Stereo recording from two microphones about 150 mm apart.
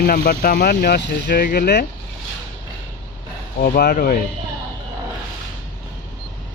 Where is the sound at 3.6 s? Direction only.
85° left.